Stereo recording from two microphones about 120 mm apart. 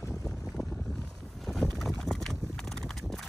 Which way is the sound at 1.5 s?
Centre (ahead or behind).